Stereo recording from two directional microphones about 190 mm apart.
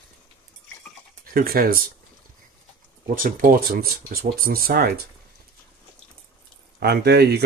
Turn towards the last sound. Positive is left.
turn(degrees=-60)  # may be behind; listen again after turning